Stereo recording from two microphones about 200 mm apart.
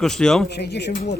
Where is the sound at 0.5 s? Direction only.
55° left (ahead or behind).